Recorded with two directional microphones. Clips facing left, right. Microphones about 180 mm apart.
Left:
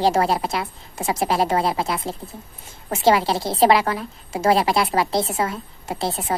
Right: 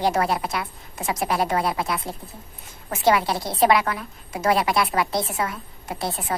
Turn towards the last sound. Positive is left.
turn(degrees=25)  # may be behind; listen again after turning